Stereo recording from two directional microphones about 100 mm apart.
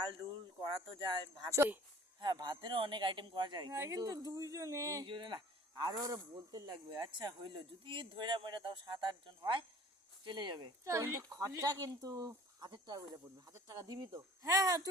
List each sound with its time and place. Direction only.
0.9 s speech: 50° right (ahead or behind)
1.5 s speech: 30° right (ahead or behind)
2.2 s speech: 45° right (ahead or behind)
3.8 s speech: 35° right (ahead or behind)
5.0 s speech: 50° right (ahead or behind)
6.7 s speech: 50° right (ahead or behind)
10.8 s speech: 30° right (ahead or behind)